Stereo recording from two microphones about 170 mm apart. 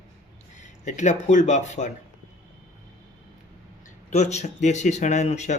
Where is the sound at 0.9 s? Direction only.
45° left (ahead or behind).